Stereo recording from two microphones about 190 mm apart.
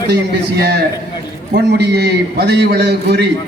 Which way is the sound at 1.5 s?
60° right (ahead or behind).